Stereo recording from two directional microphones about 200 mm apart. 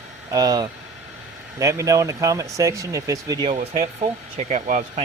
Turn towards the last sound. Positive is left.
turn(degrees=-35)  # may be behind; listen again after turning